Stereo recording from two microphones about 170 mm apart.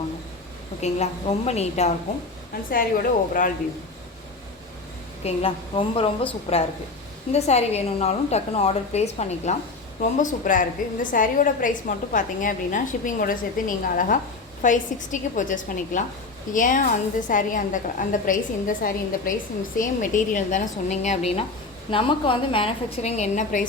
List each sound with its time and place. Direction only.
1.5 s a woman's voice: 40° left (ahead or behind)
2.6 s a woman's voice: 55° left (ahead or behind)
5.2 s a woman's voice: 35° left (ahead or behind)
10.0 s a woman's voice: 50° left (ahead or behind)